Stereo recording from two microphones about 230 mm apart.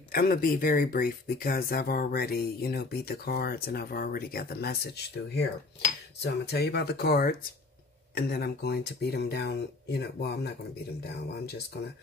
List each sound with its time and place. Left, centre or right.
0.1 s speech: left